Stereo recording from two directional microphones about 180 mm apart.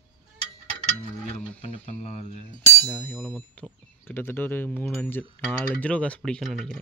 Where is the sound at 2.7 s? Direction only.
Centre (ahead or behind).